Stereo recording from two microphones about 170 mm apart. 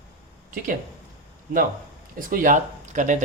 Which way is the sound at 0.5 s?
50° right (ahead or behind).